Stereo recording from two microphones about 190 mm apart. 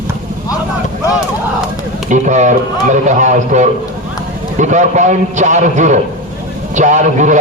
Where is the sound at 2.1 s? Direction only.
40° right (ahead or behind).